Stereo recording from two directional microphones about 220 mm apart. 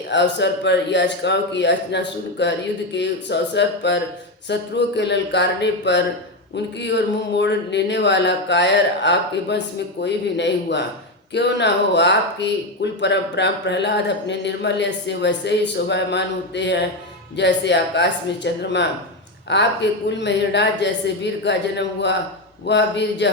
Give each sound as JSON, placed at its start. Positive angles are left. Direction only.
{"t": 0.1, "sound": "speech", "side_deg": 50}